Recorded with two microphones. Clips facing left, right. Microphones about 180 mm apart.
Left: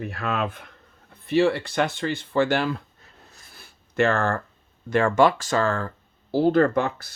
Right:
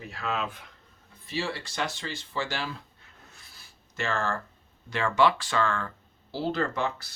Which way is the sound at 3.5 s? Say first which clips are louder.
Left 5 dB; 60° left (ahead or behind).